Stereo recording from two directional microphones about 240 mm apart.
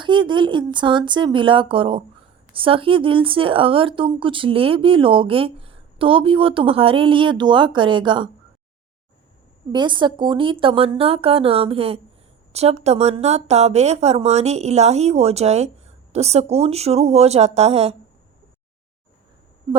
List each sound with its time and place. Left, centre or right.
0.0 s speech: centre
9.7 s speech: centre